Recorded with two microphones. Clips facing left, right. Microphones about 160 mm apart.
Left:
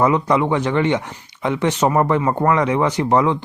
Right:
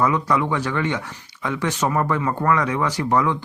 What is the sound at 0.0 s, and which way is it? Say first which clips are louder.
Speech: left 4 dB; 25° left (ahead or behind).